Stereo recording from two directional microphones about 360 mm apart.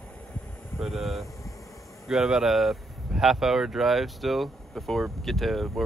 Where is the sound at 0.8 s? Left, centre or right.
Centre.